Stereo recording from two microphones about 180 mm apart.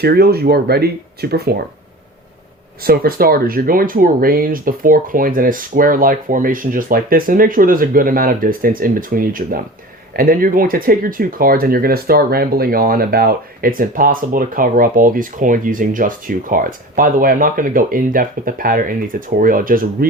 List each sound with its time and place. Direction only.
0.0 s speech: 60° right (ahead or behind)
2.8 s speech: 55° right (ahead or behind)